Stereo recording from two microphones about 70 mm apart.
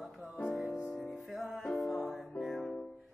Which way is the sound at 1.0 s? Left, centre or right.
Centre.